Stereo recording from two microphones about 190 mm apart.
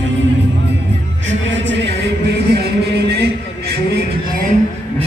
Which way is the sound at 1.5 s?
70° right (ahead or behind).